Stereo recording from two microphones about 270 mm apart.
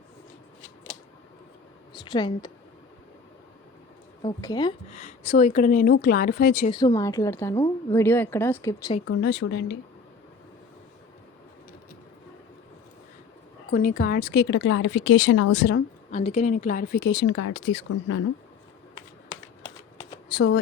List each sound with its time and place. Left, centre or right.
2.0 s a woman's voice: centre
4.2 s a woman's voice: centre; by 6.7 s left
6.7 s a woman's voice: centre
9.0 s speech: left
13.7 s speech: left
16.1 s a woman's voice: left
20.3 s speech: left